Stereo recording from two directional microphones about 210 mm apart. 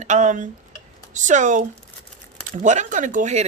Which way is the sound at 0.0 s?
35° right (ahead or behind).